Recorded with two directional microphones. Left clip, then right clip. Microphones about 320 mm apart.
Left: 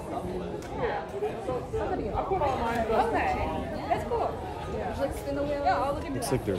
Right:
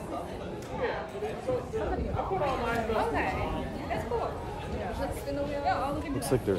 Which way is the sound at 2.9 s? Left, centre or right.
Left.